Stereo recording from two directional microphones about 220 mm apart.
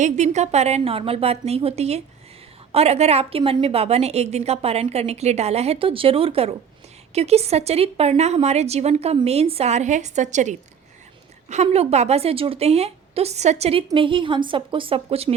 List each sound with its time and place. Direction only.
0.0 s a woman's voice: 30° right (ahead or behind)